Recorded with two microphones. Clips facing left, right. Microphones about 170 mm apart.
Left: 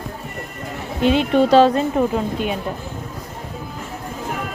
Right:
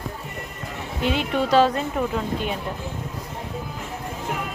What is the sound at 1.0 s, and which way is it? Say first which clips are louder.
A woman's voice: left 8 dB; 25° left (ahead or behind).